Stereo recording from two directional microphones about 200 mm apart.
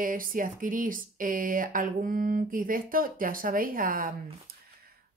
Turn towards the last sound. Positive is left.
turn(degrees=-45)  # may be behind; listen again after turning